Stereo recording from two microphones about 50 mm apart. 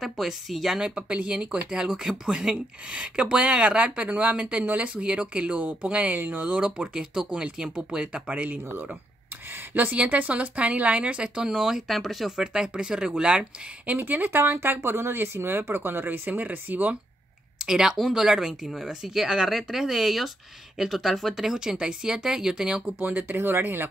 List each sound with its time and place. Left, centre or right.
0.0 s speech: centre
0.8 s speech: right
6.1 s speech: right
6.6 s speech: centre
9.8 s speech: right; by 12.4 s centre
12.4 s speech: centre
13.9 s speech: right
17.6 s speech: centre
22.8 s speech: right
23.2 s speech: right